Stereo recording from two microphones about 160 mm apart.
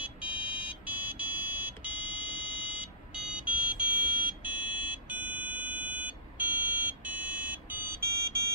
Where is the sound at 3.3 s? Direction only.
10° right (ahead or behind).